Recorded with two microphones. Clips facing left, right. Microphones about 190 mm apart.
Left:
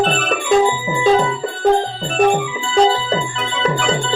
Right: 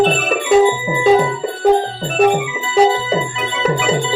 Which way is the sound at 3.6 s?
5° right (ahead or behind).